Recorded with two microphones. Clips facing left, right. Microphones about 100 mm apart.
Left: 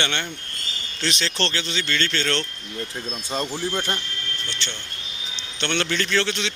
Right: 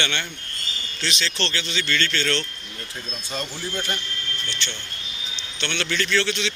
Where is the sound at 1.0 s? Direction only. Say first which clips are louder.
Left 2 dB; 45° left (ahead or behind); by 2.3 s 30° left (ahead or behind).